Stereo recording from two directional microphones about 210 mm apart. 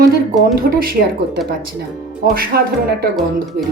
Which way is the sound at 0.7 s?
45° right (ahead or behind).